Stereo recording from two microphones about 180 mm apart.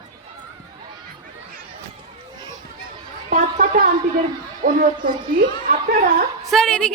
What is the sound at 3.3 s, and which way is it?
Chatter, 45° right (ahead or behind).